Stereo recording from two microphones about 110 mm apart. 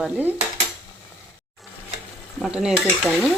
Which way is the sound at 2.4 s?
5° right (ahead or behind).